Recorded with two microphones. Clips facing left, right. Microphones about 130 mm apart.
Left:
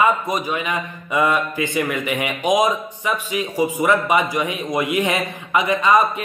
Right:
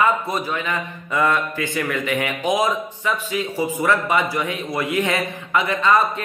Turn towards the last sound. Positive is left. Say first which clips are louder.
# left 2 dB
turn(degrees=15)  # may be behind; listen again after turning